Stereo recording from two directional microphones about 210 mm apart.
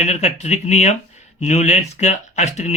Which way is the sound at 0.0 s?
30° left (ahead or behind).